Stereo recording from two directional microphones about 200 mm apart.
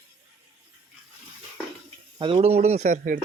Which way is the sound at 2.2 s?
25° right (ahead or behind).